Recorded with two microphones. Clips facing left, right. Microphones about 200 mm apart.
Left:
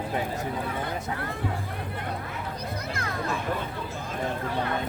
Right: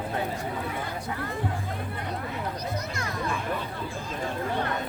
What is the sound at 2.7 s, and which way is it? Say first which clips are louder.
Children playing: even; 55° left (ahead or behind).